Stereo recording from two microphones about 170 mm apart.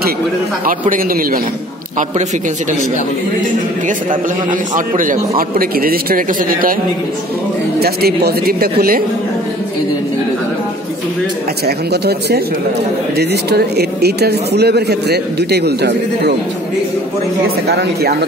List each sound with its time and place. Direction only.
0.7 s a man's voice: 55° right (ahead or behind)
3.8 s a man's voice: 50° right (ahead or behind)
7.8 s a man's voice: 65° right (ahead or behind)
11.6 s speech: 70° right (ahead or behind)
17.6 s speech: 70° right (ahead or behind)